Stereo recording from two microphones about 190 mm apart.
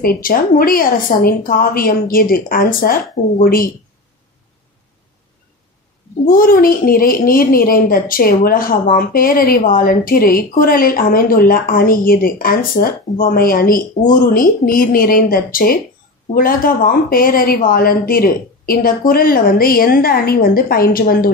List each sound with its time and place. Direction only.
0.0 s a woman's voice: 50° left (ahead or behind)
6.2 s a woman's voice: 45° left (ahead or behind)